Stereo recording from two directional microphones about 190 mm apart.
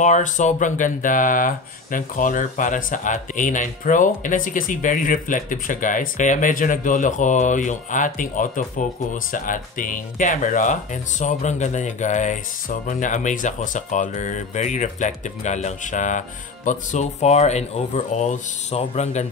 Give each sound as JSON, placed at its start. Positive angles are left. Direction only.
{"t": 0.0, "sound": "speech", "side_deg": 40}